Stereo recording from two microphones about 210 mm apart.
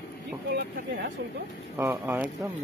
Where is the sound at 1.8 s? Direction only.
10° right (ahead or behind).